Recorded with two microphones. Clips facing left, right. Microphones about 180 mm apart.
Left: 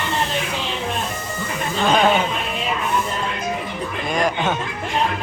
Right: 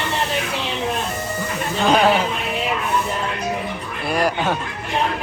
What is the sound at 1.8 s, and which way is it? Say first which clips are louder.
Chatter: right 1 dB; 10° right (ahead or behind).